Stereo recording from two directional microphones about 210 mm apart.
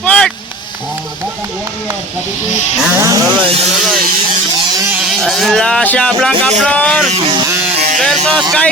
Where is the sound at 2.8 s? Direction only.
10° right (ahead or behind).